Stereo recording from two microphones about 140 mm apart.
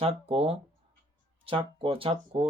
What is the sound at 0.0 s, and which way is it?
Speech, 45° right (ahead or behind).